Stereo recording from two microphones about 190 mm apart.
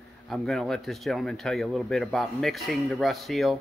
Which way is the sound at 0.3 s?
Centre (ahead or behind).